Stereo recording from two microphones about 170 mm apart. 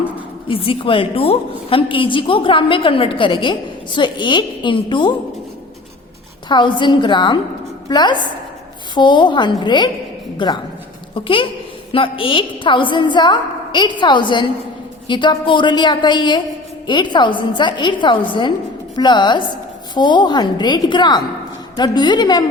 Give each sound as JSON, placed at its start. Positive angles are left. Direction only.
{"t": 0.4, "sound": "a woman's voice", "side_deg": 30}
{"t": 6.5, "sound": "a woman's voice", "side_deg": 25}